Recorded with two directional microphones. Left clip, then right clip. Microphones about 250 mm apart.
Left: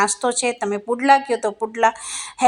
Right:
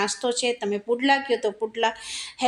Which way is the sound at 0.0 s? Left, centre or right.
Centre.